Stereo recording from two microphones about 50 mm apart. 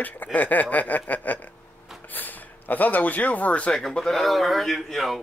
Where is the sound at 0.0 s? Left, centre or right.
Left.